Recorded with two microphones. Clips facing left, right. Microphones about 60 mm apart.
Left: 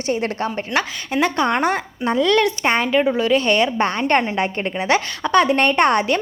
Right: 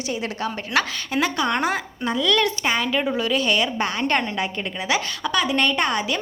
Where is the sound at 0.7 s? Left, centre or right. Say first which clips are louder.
Even; centre.